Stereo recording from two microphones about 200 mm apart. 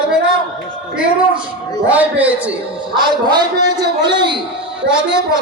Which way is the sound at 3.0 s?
20° right (ahead or behind).